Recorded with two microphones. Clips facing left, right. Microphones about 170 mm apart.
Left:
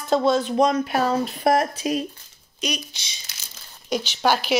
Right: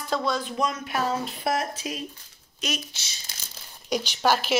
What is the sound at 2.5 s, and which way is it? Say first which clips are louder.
Speech: left 3 dB; centre (ahead or behind).